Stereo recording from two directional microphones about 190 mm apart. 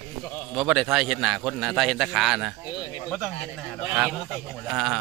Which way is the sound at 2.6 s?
20° left (ahead or behind).